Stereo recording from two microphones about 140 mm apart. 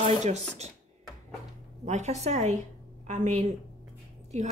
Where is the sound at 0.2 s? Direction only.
55° right (ahead or behind).